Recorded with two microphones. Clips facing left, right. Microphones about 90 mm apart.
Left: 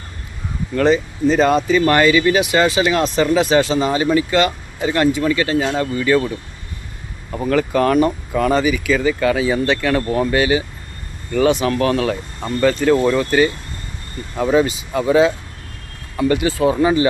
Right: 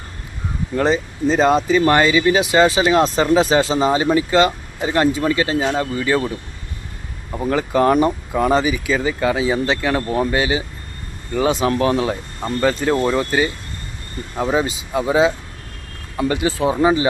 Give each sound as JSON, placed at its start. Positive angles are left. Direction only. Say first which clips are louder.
{"t": 0.8, "sound": "speech", "louder": "left 3 dB", "side_deg": -20}
{"t": 7.3, "sound": "speech", "louder": "even", "side_deg": -5}
{"t": 7.5, "sound": "speech", "louder": "even", "side_deg": -20}